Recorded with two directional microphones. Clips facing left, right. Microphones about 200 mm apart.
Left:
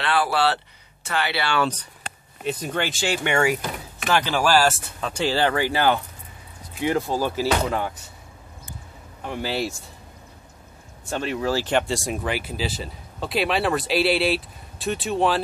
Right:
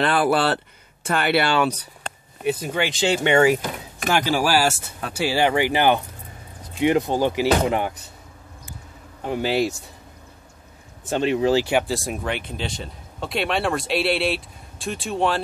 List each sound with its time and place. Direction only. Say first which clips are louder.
0.0 s speech: right 3 dB; 50° right (ahead or behind)
1.6 s speech: right 2 dB; 10° right (ahead or behind)
4.1 s speech: even; 10° right (ahead or behind)
9.2 s speech: right 5 dB; 20° right (ahead or behind)
11.1 s speech: right 5 dB; 20° right (ahead or behind)
11.6 s speech: right 1 dB; 5° right (ahead or behind)